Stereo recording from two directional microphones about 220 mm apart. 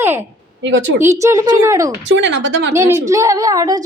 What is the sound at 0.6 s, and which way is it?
Speech, 55° right (ahead or behind).